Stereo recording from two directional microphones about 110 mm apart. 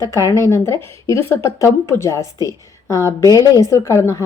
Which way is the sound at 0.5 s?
25° left (ahead or behind).